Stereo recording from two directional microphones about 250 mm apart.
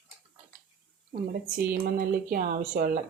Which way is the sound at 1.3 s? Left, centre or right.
Right.